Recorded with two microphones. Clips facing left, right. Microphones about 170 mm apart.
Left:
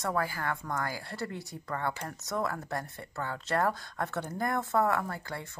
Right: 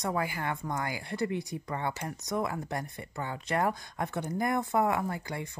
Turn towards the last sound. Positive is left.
turn(degrees=-15)  # may be behind; listen again after turning